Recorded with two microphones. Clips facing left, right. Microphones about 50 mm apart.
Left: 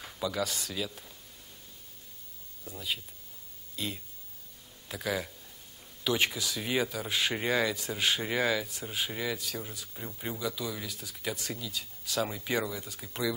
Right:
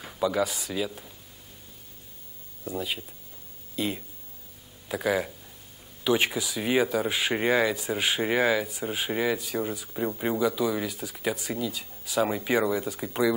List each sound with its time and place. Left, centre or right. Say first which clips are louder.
0.0 s speech: right 7 dB; centre
2.8 s speech: right 4 dB; right
9.9 s speech: right 12 dB; right